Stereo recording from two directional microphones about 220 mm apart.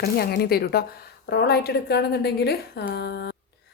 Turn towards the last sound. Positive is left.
turn(degrees=50)  # may be behind; listen again after turning